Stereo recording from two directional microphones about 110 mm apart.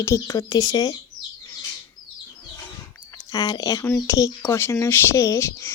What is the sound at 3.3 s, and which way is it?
Speech, 30° left (ahead or behind).